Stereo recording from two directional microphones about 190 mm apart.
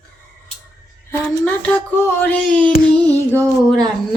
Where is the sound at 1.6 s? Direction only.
10° left (ahead or behind).